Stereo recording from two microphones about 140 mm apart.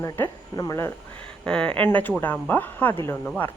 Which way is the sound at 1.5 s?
5° left (ahead or behind).